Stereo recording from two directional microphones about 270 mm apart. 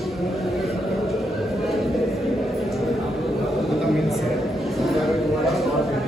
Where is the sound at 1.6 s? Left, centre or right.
Centre.